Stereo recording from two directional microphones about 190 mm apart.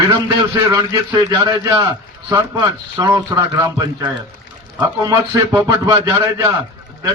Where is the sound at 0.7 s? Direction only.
15° right (ahead or behind).